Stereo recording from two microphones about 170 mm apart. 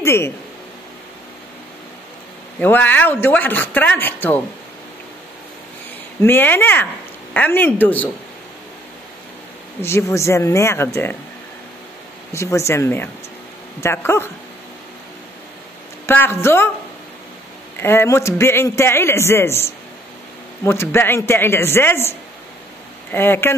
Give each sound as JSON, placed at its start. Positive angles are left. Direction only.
{"t": 0.0, "sound": "speech", "side_deg": 15}
{"t": 2.6, "sound": "a man's voice", "side_deg": 10}
{"t": 6.2, "sound": "a man's voice", "side_deg": 10}
{"t": 9.8, "sound": "a man's voice", "side_deg": 15}
{"t": 12.3, "sound": "a man's voice", "side_deg": 15}
{"t": 16.1, "sound": "a man's voice", "side_deg": 15}
{"t": 17.7, "sound": "a man's voice", "side_deg": 15}
{"t": 23.1, "sound": "a man's voice", "side_deg": 15}